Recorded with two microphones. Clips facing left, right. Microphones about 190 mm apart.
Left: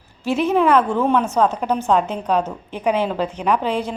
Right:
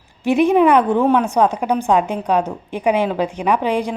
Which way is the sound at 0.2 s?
15° right (ahead or behind).